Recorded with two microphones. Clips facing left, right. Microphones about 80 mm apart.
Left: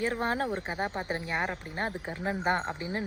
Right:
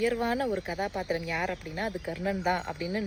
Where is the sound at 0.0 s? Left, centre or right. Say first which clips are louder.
Right 2 dB; left.